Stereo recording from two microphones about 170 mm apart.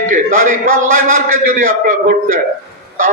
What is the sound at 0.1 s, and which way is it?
A man's voice, 50° right (ahead or behind).